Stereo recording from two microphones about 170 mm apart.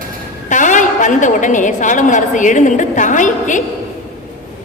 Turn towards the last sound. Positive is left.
turn(degrees=50)  # may be behind; listen again after turning